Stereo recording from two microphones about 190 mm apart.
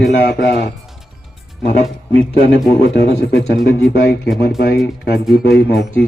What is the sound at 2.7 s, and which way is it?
A man's voice, 55° left (ahead or behind).